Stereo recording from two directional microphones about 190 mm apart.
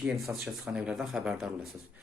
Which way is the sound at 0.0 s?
Centre (ahead or behind).